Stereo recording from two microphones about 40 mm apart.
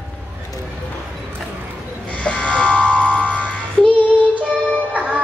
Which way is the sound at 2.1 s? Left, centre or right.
Left.